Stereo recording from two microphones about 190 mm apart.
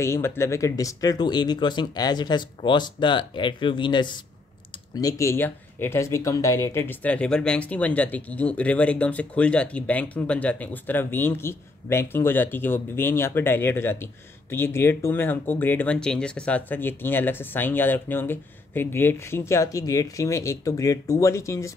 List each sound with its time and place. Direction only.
0.0 s speech: 15° left (ahead or behind)